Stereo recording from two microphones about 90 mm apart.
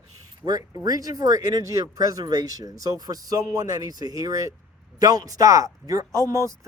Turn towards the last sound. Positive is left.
turn(degrees=-35)  # may be behind; listen again after turning